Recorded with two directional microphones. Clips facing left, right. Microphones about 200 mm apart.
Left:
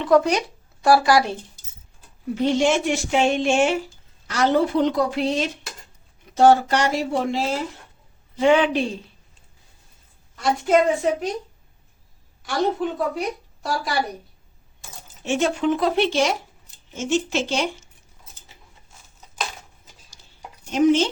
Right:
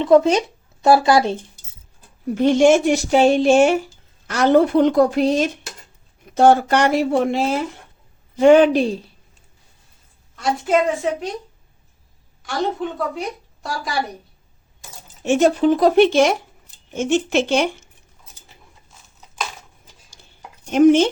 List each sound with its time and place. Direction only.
0.0 s speech: 25° right (ahead or behind)
2.3 s a woman's voice: 50° right (ahead or behind)
4.3 s speech: 55° right (ahead or behind)
6.3 s speech: 55° right (ahead or behind)
8.4 s speech: 45° right (ahead or behind)
10.3 s a woman's voice: centre (ahead or behind)
12.4 s a woman's voice: centre (ahead or behind)
15.2 s speech: 45° right (ahead or behind)
16.0 s speech: 55° right (ahead or behind)
20.7 s speech: 55° right (ahead or behind)